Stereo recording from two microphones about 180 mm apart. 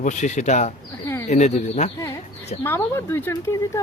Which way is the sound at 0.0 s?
45° left (ahead or behind).